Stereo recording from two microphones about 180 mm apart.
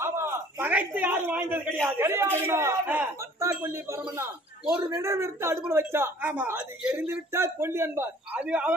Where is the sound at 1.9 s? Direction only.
15° right (ahead or behind).